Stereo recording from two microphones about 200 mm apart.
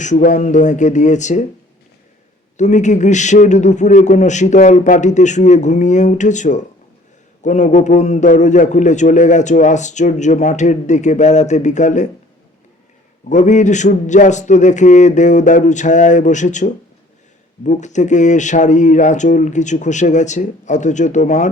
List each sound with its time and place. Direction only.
0.0 s a man's voice: 35° left (ahead or behind)
2.6 s a man's voice: 35° left (ahead or behind)
13.2 s a man's voice: 35° left (ahead or behind)